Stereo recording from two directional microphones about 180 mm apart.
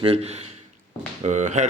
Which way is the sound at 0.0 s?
35° right (ahead or behind).